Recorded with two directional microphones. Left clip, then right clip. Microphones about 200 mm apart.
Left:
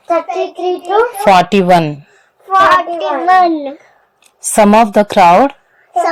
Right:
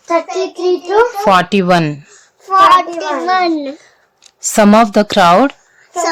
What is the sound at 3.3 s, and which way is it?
A child's voice, 10° right (ahead or behind).